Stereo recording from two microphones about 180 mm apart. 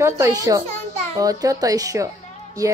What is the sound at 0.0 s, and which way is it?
Speech, 20° right (ahead or behind).